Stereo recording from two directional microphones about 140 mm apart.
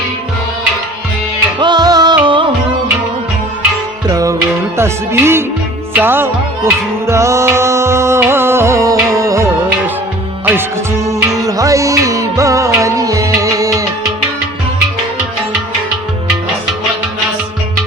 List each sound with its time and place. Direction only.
1.5 s music: 30° right (ahead or behind)
4.0 s music: 25° right (ahead or behind)